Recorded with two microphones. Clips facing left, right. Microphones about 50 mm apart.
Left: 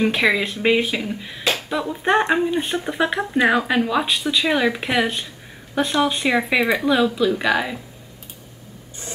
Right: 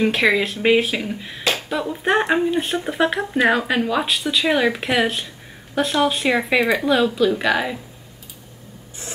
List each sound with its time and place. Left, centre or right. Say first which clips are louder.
0.0 s speech: right 1 dB; centre